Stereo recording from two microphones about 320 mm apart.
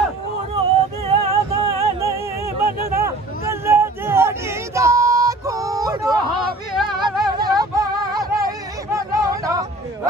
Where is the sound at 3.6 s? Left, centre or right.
Centre.